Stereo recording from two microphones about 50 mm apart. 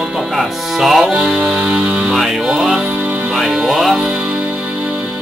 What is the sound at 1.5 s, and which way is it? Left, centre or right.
Music, centre.